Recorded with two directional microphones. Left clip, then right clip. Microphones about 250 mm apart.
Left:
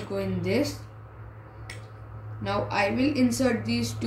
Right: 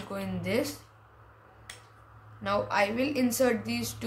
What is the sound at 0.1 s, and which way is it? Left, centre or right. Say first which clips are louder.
Speech: left 3 dB; right.